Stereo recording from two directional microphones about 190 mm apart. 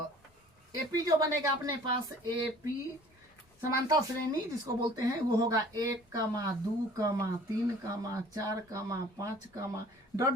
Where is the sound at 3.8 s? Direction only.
20° right (ahead or behind).